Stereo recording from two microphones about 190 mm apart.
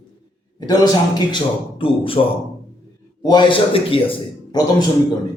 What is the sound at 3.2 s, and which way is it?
Speech, 25° left (ahead or behind).